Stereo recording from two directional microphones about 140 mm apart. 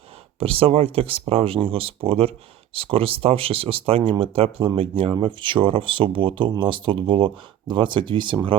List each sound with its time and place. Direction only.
0.3 s speech: 40° right (ahead or behind)